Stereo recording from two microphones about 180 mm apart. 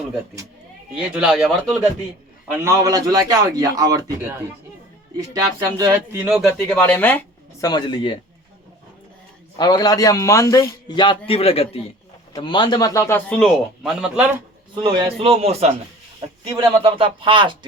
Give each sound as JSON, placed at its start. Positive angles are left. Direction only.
{"t": 0.9, "sound": "speech", "side_deg": -5}
{"t": 2.6, "sound": "a man's voice", "side_deg": -20}
{"t": 6.7, "sound": "a man's voice", "side_deg": 10}
{"t": 7.6, "sound": "a man's voice", "side_deg": 25}
{"t": 9.6, "sound": "a man's voice", "side_deg": 20}
{"t": 14.8, "sound": "a man's voice", "side_deg": -30}